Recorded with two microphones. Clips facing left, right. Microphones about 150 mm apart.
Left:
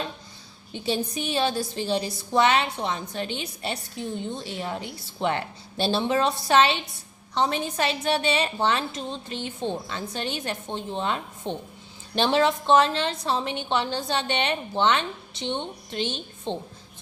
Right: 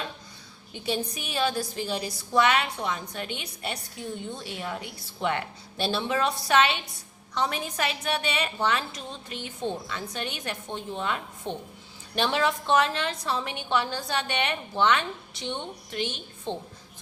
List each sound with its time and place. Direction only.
0.7 s a woman's voice: 30° left (ahead or behind)